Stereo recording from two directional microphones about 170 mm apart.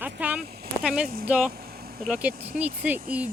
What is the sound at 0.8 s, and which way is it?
Speech, 5° right (ahead or behind).